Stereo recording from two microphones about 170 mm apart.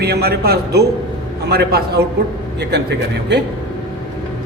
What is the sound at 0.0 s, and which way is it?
A man's voice, 70° right (ahead or behind).